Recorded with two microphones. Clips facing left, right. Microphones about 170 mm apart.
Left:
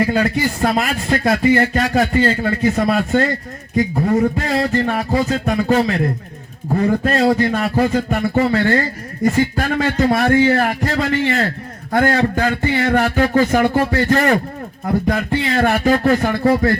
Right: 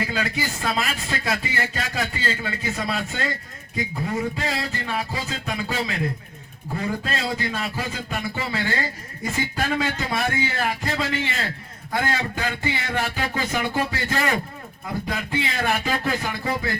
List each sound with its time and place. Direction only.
0.0 s a man's voice: 50° left (ahead or behind)